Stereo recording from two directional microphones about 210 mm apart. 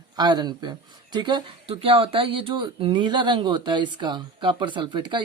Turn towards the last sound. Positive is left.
turn(degrees=-20)  # may be behind; listen again after turning